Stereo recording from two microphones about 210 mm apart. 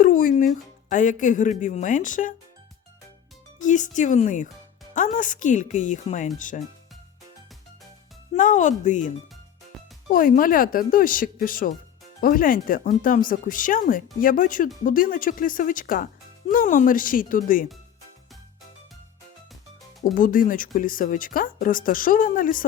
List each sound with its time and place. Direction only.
0.0 s speech: 40° left (ahead or behind)
3.6 s speech: 35° left (ahead or behind)
8.3 s speech: 35° left (ahead or behind)
20.1 s speech: 40° left (ahead or behind)